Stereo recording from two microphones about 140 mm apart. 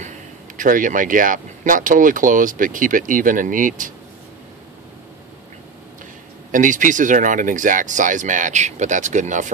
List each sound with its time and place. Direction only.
0.6 s speech: 70° right (ahead or behind)
6.5 s speech: 70° right (ahead or behind)